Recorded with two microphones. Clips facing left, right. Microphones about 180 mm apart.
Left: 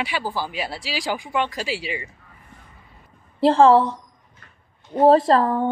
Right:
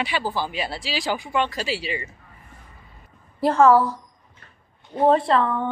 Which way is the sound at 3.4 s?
30° left (ahead or behind).